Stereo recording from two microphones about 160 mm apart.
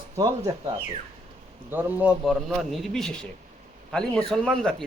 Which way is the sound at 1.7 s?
10° right (ahead or behind).